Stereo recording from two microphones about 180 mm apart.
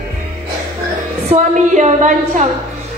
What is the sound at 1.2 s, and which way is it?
A woman's voice, 40° right (ahead or behind).